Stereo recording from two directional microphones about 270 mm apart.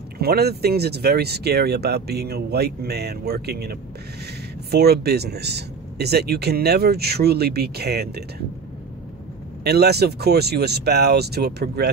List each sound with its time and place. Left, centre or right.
0.2 s speech: right
9.6 s speech: right